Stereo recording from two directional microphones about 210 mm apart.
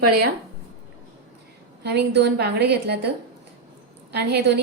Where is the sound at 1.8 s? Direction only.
55° right (ahead or behind).